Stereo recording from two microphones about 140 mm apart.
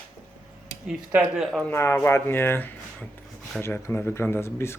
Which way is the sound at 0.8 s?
10° right (ahead or behind).